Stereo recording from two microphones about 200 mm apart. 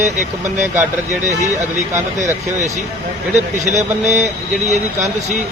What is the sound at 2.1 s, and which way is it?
Speech, 35° right (ahead or behind).